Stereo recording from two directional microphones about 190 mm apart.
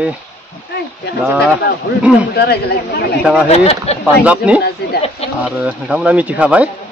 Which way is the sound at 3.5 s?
35° left (ahead or behind).